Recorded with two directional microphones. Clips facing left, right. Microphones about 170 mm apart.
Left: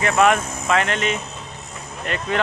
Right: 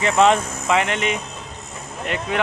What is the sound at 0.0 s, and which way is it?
Speech, 20° right (ahead or behind).